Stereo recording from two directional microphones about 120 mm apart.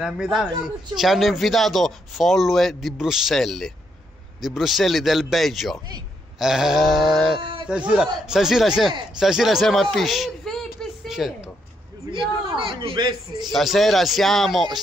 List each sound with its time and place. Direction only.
0.0 s speech: 5° right (ahead or behind)
7.3 s a sound: 45° right (ahead or behind)
7.6 s a man's voice: 10° right (ahead or behind)
12.1 s a man's voice: 45° right (ahead or behind)
13.4 s speech: centre (ahead or behind)